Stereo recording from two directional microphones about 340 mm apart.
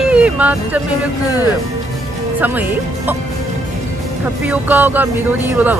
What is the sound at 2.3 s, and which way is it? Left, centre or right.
Speech, centre.